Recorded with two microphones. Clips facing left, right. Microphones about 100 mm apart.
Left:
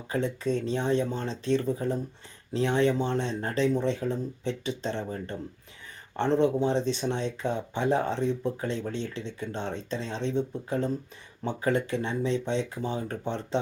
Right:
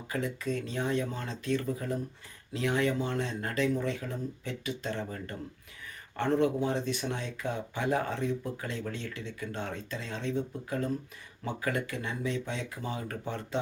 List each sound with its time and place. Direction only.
0.1 s speech: 30° left (ahead or behind)